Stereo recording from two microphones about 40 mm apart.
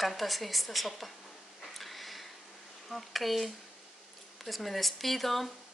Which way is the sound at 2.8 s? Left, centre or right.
Centre.